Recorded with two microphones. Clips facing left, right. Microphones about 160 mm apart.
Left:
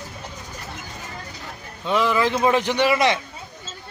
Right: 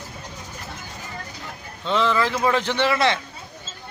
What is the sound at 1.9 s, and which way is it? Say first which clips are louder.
A man's voice: left 1 dB; 10° left (ahead or behind).